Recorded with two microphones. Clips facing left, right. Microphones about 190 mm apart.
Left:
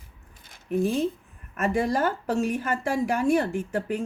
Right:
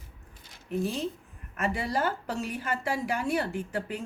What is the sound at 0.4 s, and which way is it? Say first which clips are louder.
Squish: left 6 dB; 55° left (ahead or behind).